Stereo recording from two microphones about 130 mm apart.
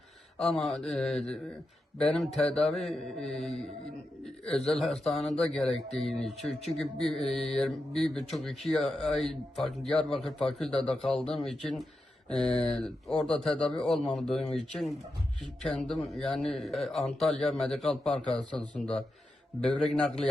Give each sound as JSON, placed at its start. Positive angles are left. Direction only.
{"t": 0.3, "sound": "speech", "side_deg": 5}